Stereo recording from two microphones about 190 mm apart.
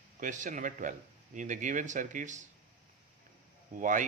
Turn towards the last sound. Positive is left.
turn(degrees=-45)  # may be behind; listen again after turning